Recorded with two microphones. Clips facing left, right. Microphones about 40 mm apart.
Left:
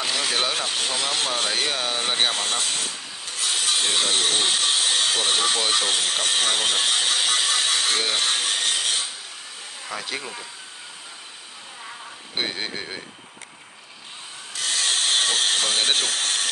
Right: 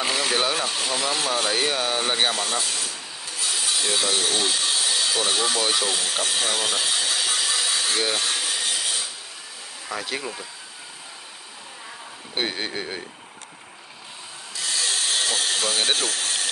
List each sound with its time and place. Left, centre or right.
0.0 s vehicle: right
0.7 s speech: left
1.7 s speech: centre
2.3 s sawing: left
8.0 s wood: left
9.8 s speech: centre
12.4 s speech: centre
14.5 s wood: left